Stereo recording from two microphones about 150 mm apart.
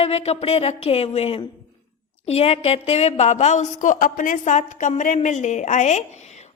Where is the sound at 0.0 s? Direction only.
40° left (ahead or behind).